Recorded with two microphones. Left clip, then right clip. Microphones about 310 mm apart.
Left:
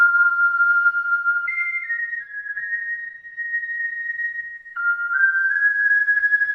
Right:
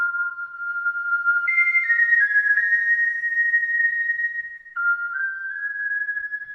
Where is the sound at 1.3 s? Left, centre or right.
Centre; by 3.0 s right.